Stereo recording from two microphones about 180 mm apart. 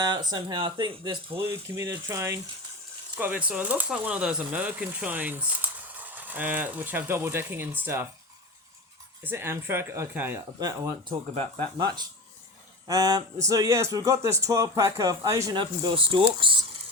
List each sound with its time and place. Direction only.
0.0 s speech: 25° right (ahead or behind)
1.4 s speech: 15° right (ahead or behind)
9.2 s speech: 15° right (ahead or behind)
11.3 s speech: 35° right (ahead or behind)